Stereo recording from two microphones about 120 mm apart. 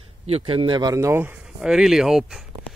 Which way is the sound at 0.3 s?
45° right (ahead or behind).